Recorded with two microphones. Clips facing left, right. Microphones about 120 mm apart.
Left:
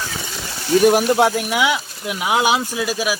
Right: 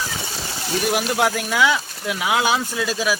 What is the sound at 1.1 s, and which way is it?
Speech, 20° left (ahead or behind).